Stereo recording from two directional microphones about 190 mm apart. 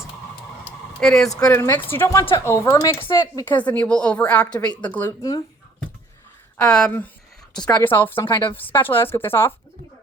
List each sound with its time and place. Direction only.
0.9 s speech: 5° left (ahead or behind)
1.5 s a woman's voice: 15° left (ahead or behind)
6.6 s a woman's voice: 5° left (ahead or behind)
8.3 s speech: 25° left (ahead or behind)
8.5 s a woman's voice: 10° left (ahead or behind)